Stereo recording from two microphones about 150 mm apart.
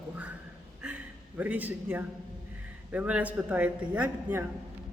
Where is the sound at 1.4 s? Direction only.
10° right (ahead or behind).